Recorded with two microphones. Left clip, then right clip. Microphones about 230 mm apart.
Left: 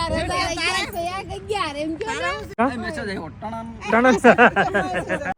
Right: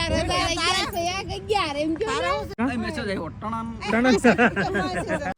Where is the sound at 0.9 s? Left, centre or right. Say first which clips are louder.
Even; left.